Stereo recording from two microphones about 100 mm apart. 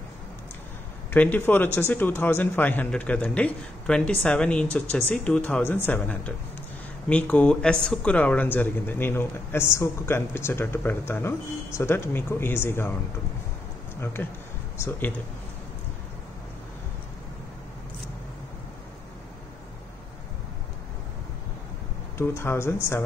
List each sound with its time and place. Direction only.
1.1 s a man's voice: 20° left (ahead or behind)
14.0 s speech: 25° left (ahead or behind)
22.1 s speech: 25° left (ahead or behind)